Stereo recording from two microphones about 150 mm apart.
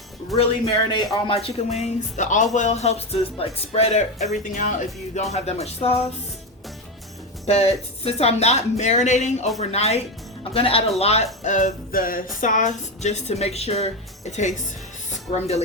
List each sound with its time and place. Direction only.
0.3 s speech: 40° left (ahead or behind)
7.4 s speech: 45° left (ahead or behind)
11.4 s music: 55° left (ahead or behind)
12.4 s speech: 60° left (ahead or behind)